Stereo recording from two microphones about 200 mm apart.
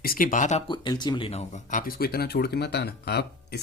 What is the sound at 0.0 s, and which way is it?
Speech, 45° left (ahead or behind).